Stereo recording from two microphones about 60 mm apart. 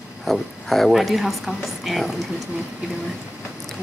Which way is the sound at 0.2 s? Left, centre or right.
Centre.